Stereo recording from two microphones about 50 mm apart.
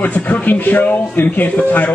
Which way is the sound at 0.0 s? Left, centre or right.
Left.